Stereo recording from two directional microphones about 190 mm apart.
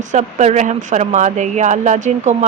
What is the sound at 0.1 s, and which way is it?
Speech, 40° right (ahead or behind).